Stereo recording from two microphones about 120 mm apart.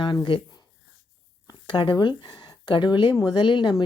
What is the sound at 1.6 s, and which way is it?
A woman's voice, 40° left (ahead or behind).